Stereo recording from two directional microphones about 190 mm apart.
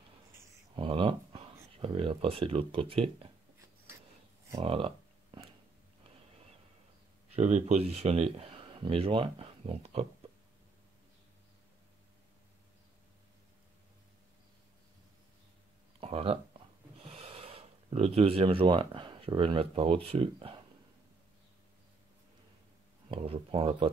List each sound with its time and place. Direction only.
0.7 s speech: 25° right (ahead or behind)
4.6 s a sound: 30° right (ahead or behind)
7.3 s speech: 40° right (ahead or behind)
16.0 s a sound: 30° right (ahead or behind)
17.0 s speech: 30° right (ahead or behind)
23.0 s speech: 30° right (ahead or behind)